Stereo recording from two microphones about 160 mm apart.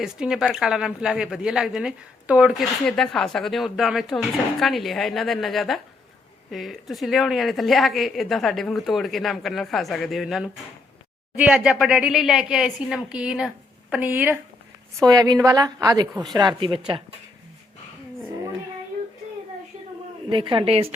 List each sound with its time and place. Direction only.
0.0 s a woman's voice: 5° right (ahead or behind)
2.8 s a woman's voice: 5° left (ahead or behind); by 14.3 s 10° right (ahead or behind)
14.9 s a woman's voice: 20° right (ahead or behind)
20.3 s a woman's voice: 30° right (ahead or behind)